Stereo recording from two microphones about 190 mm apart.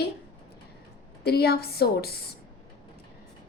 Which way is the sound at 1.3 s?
55° left (ahead or behind).